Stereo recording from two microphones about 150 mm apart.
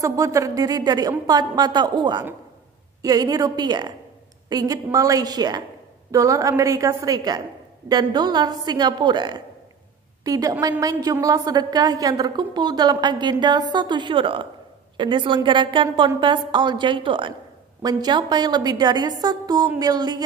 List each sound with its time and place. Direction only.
0.0 s a woman's voice: 20° right (ahead or behind)